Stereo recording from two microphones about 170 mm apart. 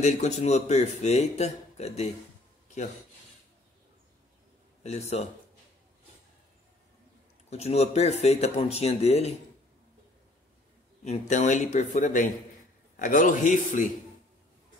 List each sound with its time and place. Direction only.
0.0 s speech: 40° left (ahead or behind)
4.8 s speech: 40° left (ahead or behind)
7.4 s speech: 40° left (ahead or behind)
11.1 s speech: 45° left (ahead or behind)